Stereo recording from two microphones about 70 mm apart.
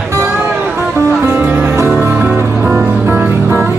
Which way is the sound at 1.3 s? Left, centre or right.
Right.